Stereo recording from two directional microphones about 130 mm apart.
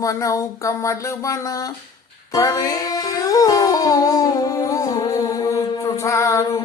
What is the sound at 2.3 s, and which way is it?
Music, 25° left (ahead or behind).